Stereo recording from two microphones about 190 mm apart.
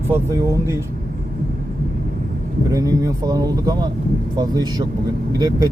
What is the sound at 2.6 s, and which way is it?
Speech, 20° right (ahead or behind).